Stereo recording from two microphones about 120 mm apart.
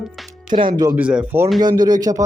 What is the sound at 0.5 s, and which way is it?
Speech, 90° right.